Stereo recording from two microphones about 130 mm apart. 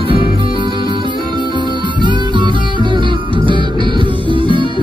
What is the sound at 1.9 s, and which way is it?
Music, 35° right (ahead or behind).